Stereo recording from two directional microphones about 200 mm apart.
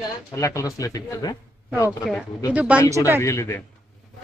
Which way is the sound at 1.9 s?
Centre (ahead or behind).